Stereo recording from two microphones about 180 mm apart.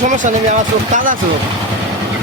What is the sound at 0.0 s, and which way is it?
Speech, 45° right (ahead or behind).